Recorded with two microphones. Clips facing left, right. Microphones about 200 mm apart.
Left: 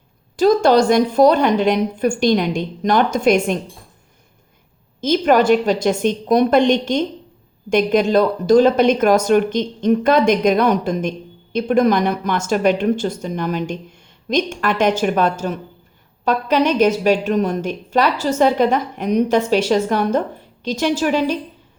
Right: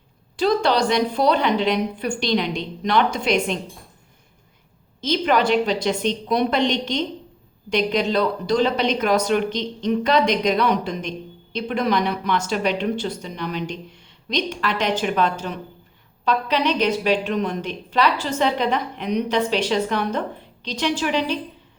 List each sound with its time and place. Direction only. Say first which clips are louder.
0.3 s a woman's voice: left 6 dB; 45° left (ahead or behind)
4.9 s a woman's voice: left 5 dB; 50° left (ahead or behind)